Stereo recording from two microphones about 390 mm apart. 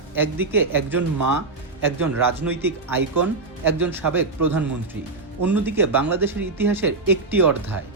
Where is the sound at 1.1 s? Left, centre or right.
Right.